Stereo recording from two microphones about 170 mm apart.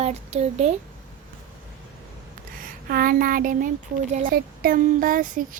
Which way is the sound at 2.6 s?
60° right (ahead or behind).